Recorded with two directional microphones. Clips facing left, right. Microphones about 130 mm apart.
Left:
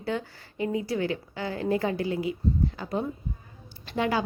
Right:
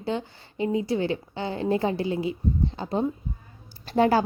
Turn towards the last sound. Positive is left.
turn(degrees=-40)  # may be behind; listen again after turning